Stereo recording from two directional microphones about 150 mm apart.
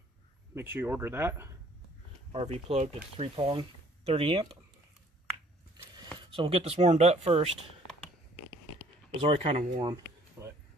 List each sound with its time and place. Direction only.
0.6 s speech: 15° right (ahead or behind)
2.3 s speech: 45° right (ahead or behind)
3.2 s speech: 35° right (ahead or behind)
6.1 s speech: 40° right (ahead or behind)
9.2 s speech: 40° right (ahead or behind)
10.4 s a sound: 15° right (ahead or behind)